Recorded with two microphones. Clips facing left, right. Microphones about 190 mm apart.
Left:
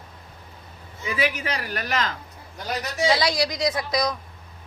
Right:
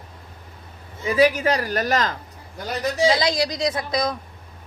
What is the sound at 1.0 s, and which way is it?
A man's voice, 40° right (ahead or behind).